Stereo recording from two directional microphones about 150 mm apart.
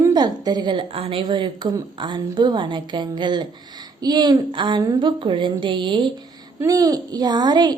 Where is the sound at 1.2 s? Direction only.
30° right (ahead or behind).